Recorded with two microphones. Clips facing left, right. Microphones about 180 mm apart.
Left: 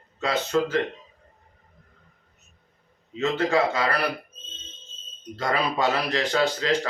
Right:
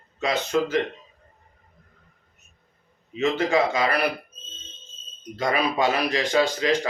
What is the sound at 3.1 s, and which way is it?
Speech, 15° right (ahead or behind).